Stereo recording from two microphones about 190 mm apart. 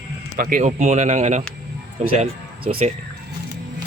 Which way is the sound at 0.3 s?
40° right (ahead or behind).